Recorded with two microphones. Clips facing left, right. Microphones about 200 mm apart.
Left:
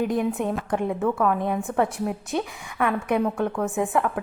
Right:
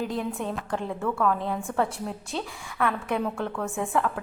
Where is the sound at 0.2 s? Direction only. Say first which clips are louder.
Left 6 dB; 20° left (ahead or behind).